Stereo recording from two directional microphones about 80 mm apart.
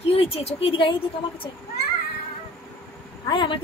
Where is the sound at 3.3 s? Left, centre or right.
Left.